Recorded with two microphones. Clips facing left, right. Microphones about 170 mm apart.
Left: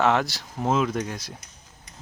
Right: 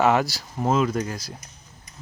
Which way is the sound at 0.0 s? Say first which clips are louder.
Right 2 dB; 5° right (ahead or behind).